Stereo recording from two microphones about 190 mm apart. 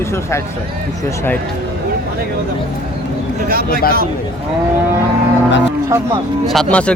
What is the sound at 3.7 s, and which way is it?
Speech, 50° left (ahead or behind).